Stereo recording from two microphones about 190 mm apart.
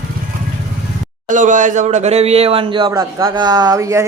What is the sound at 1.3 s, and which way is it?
Speech, 40° right (ahead or behind).